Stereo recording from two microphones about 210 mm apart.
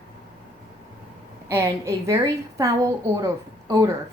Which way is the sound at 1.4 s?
15° right (ahead or behind).